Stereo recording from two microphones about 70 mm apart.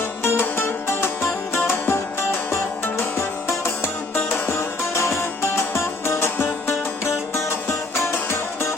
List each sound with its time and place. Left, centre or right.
0.0 s music: left